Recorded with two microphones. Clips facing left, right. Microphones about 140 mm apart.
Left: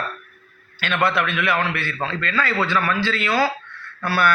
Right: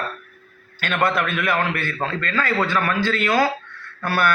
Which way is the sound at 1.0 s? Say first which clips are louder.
Even; 45° right (ahead or behind).